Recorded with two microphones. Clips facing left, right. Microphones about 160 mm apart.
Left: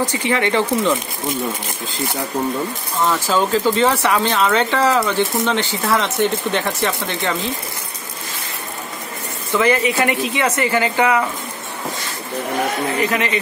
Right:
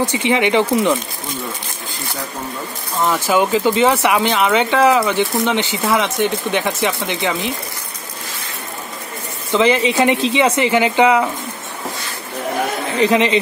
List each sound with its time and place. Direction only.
0.1 s speech: 15° right (ahead or behind)
3.0 s speech: 15° right (ahead or behind)
9.5 s speech: 20° right (ahead or behind)
13.0 s speech: 20° right (ahead or behind)